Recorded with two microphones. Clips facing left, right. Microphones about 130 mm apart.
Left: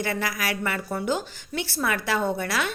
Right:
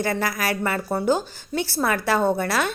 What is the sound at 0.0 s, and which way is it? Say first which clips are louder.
A woman's voice: right 4 dB; 45° right (ahead or behind).